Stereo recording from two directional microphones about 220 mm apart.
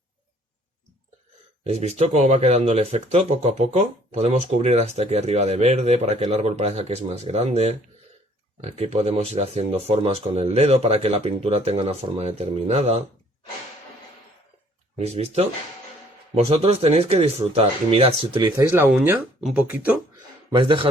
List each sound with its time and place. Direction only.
1.6 s speech: 30° right (ahead or behind)
14.9 s speech: 30° right (ahead or behind)
19.4 s speech: centre (ahead or behind)
20.5 s speech: 20° right (ahead or behind)